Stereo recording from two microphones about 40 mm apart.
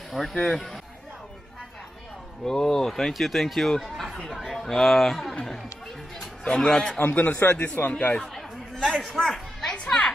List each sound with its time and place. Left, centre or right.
0.1 s a man's voice: centre
0.4 s speech: centre
2.4 s speech: centre
3.1 s speech: centre
3.8 s chatter: centre
4.3 s speech: centre
4.6 s speech: centre
6.4 s speech: centre
7.0 s a man's voice: left
8.2 s chatter: centre
8.8 s speech: centre
9.8 s a sound: left